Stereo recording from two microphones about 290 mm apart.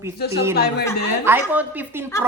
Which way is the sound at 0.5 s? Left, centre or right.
Left.